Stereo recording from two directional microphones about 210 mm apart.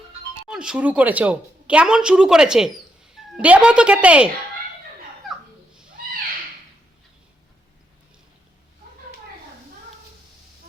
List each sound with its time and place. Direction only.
0.4 s a woman's voice: 5° right (ahead or behind)